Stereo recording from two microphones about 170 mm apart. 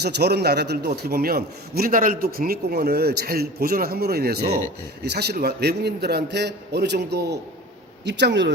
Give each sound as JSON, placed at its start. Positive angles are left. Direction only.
{"t": 0.0, "sound": "a man's voice", "side_deg": -75}
{"t": 0.9, "sound": "a man's voice", "side_deg": -60}
{"t": 8.0, "sound": "speech", "side_deg": -90}